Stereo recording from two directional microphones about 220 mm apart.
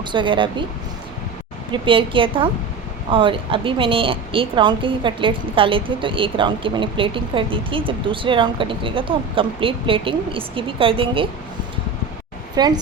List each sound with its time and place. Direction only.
0.0 s a woman's voice: 20° right (ahead or behind)
1.7 s a woman's voice: 25° right (ahead or behind)
12.5 s a woman's voice: 20° right (ahead or behind)